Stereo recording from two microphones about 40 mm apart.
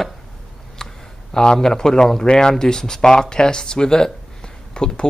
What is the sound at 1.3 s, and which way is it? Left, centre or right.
Speech, centre.